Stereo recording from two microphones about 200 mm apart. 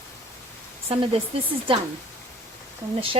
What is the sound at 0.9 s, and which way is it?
Speech, 30° right (ahead or behind).